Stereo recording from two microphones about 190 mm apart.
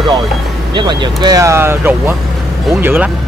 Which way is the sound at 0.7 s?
25° right (ahead or behind).